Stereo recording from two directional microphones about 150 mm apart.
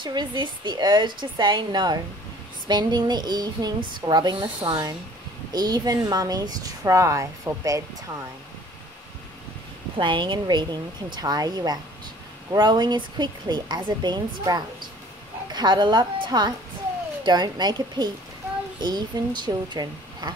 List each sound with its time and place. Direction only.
0.0 s a woman's voice: 30° right (ahead or behind)
9.9 s a woman's voice: 35° right (ahead or behind)